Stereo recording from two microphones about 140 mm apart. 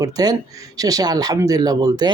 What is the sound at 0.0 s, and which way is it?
A man's voice, 25° right (ahead or behind).